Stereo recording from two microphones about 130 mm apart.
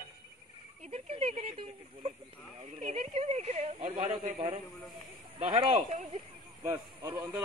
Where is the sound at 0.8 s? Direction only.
55° right (ahead or behind).